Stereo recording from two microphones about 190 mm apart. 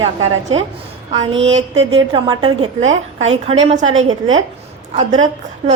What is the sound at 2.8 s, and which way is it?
A woman's voice, 35° right (ahead or behind).